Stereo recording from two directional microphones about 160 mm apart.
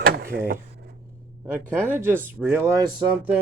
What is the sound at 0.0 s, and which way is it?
Mechanisms, 65° right (ahead or behind).